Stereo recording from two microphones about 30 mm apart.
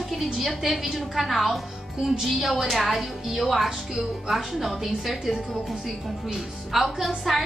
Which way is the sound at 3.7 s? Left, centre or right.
Centre.